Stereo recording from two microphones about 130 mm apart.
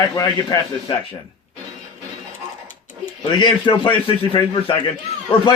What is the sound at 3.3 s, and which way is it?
A man's voice, 40° left (ahead or behind).